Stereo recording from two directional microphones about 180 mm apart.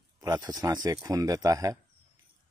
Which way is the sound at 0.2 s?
20° right (ahead or behind).